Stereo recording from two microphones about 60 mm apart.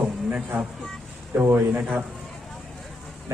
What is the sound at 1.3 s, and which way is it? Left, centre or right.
Speech, right.